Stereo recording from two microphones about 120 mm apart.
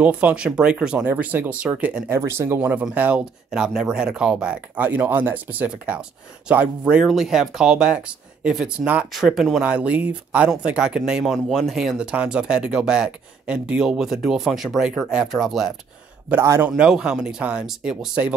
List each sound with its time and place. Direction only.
0.0 s speech: 10° right (ahead or behind)
16.3 s a man's voice: 20° right (ahead or behind)
16.7 s speech: 5° right (ahead or behind)